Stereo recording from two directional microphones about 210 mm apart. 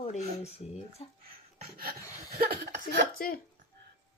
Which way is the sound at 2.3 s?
45° right (ahead or behind).